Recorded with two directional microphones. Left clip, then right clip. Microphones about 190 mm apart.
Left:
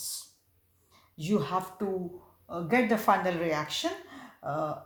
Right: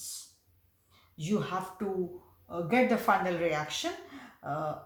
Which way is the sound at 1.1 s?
40° left (ahead or behind).